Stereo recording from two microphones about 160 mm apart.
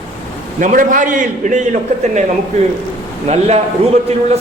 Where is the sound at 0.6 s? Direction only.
55° right (ahead or behind).